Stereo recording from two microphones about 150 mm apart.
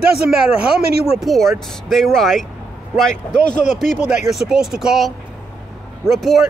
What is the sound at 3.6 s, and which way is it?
Speech, 55° left (ahead or behind).